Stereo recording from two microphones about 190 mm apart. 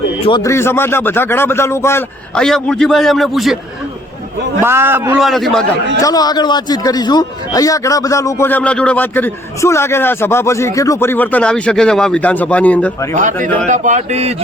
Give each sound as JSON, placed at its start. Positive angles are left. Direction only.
{"t": 0.3, "sound": "a man's voice", "side_deg": 20}
{"t": 4.6, "sound": "a man's voice", "side_deg": -10}
{"t": 6.0, "sound": "a man's voice", "side_deg": 20}
{"t": 13.7, "sound": "a sound", "side_deg": -40}